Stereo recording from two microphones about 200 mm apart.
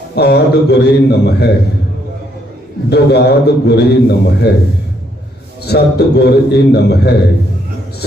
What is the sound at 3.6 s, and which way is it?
Speech, 55° left (ahead or behind).